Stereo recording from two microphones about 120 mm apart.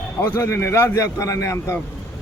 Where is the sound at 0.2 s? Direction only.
20° left (ahead or behind).